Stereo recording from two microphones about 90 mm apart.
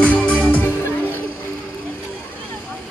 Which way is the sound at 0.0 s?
15° left (ahead or behind).